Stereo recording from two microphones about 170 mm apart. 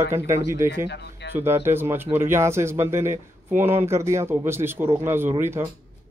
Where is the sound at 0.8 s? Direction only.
85° left.